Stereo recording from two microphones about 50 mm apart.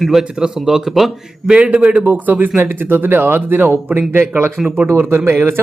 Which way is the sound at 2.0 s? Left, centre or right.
Right.